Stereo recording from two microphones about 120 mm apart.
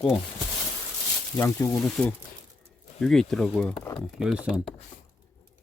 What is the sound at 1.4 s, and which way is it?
Speech, 25° left (ahead or behind).